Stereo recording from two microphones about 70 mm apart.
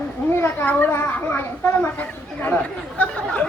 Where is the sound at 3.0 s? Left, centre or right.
Centre.